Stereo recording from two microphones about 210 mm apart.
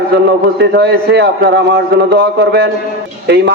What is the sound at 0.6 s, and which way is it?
A man's voice, 50° right (ahead or behind).